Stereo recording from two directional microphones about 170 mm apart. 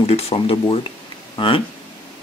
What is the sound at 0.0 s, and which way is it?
Speech, 35° left (ahead or behind).